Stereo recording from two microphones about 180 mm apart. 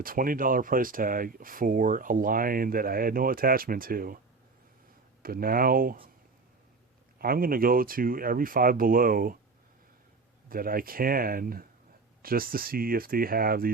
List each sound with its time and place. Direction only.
0.0 s speech: 50° right (ahead or behind)
5.2 s speech: 55° right (ahead or behind)
7.2 s speech: 55° right (ahead or behind)
10.5 s speech: 50° right (ahead or behind)